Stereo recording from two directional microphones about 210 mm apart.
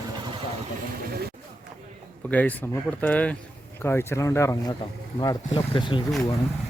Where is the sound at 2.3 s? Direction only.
5° left (ahead or behind); by 6.0 s 25° left (ahead or behind).